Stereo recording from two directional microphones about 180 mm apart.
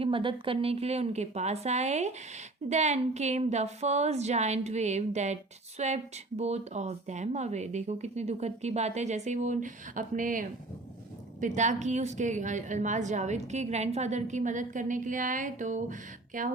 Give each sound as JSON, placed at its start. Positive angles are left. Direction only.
{"t": 0.0, "sound": "a woman's voice", "side_deg": -30}